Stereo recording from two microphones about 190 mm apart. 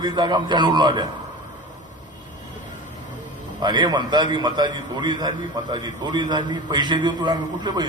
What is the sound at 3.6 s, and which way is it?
A man's voice, 20° right (ahead or behind).